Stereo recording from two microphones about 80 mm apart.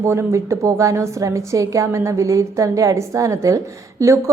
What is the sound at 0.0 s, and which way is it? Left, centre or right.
Speech, right.